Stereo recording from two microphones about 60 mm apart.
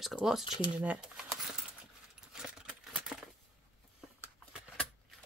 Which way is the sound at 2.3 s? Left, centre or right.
Centre.